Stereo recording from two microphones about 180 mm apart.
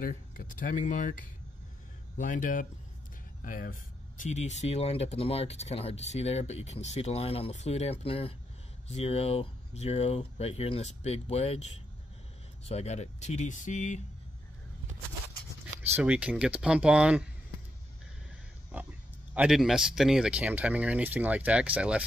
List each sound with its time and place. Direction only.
0.0 s speech: 50° left (ahead or behind)
4.2 s speech: 40° left (ahead or behind)
15.9 s speech: 5° right (ahead or behind)
18.7 s speech: 10° right (ahead or behind)